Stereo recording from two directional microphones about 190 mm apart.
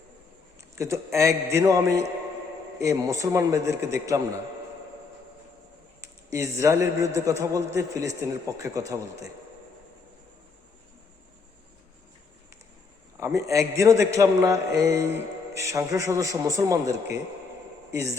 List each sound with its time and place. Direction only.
0.8 s a man's voice: 15° right (ahead or behind)
6.0 s a man's voice: 15° right (ahead or behind)
13.1 s a man's voice: 15° right (ahead or behind)
17.9 s a man's voice: 15° right (ahead or behind)